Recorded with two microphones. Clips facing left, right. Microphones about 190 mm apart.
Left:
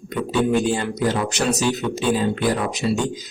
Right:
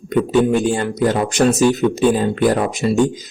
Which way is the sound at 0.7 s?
50° right (ahead or behind).